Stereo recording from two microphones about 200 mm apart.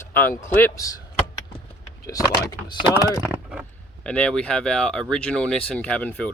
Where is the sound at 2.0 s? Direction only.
20° left (ahead or behind).